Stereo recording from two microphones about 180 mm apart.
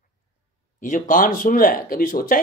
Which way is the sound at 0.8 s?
45° left (ahead or behind).